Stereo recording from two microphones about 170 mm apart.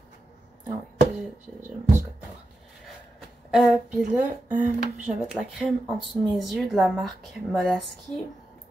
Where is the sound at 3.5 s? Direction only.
Centre (ahead or behind).